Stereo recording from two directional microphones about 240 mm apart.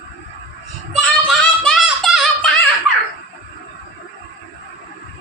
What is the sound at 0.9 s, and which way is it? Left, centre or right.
Child singing, centre.